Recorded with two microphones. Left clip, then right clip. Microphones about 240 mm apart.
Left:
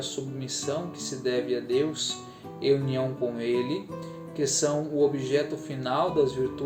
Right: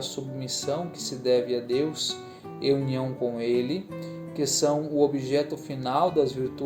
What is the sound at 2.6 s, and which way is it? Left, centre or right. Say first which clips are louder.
Speech: left 1 dB; right.